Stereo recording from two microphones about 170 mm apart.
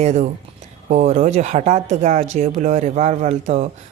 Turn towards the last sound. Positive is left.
turn(degrees=-45)  # may be behind; listen again after turning